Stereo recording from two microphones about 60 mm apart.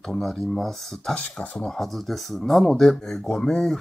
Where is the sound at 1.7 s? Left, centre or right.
Centre.